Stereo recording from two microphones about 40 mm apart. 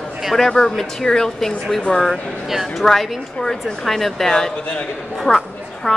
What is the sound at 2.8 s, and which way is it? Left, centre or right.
A woman's voice, centre.